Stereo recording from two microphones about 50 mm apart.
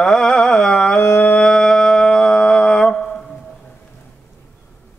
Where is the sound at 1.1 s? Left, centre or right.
Left.